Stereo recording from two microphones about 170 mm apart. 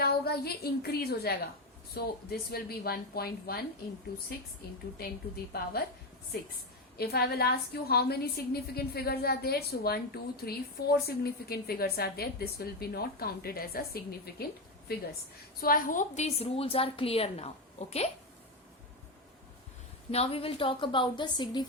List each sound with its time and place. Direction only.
0.0 s a woman's voice: 65° left (ahead or behind)
5.5 s a woman's voice: 65° left (ahead or behind)
6.9 s a woman's voice: 70° left (ahead or behind)
15.6 s a woman's voice: 55° left (ahead or behind)
20.1 s a woman's voice: 35° left (ahead or behind)